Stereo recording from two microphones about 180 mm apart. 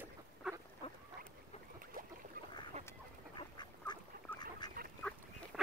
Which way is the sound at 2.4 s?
55° right (ahead or behind).